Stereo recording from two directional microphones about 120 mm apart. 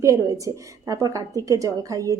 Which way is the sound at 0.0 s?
25° right (ahead or behind).